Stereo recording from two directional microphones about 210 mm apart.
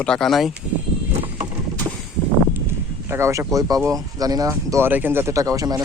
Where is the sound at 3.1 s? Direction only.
15° right (ahead or behind).